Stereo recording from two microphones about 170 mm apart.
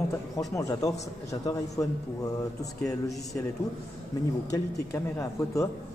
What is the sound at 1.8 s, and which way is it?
Speech, 15° left (ahead or behind).